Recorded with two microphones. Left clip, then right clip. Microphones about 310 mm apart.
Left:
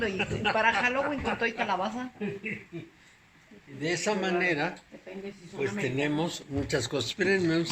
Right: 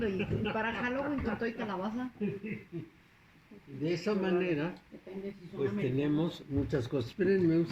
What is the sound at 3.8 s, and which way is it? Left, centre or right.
Speech, left.